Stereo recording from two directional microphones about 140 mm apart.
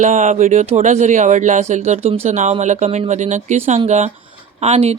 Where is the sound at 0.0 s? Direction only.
65° right (ahead or behind).